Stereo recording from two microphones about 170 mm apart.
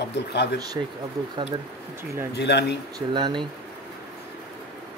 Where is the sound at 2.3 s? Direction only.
80° left.